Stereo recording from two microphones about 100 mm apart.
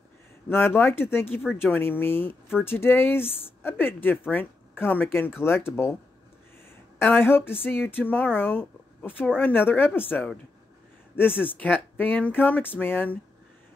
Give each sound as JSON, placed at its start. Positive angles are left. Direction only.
{"t": 0.5, "sound": "speech", "side_deg": 20}
{"t": 7.0, "sound": "speech", "side_deg": 20}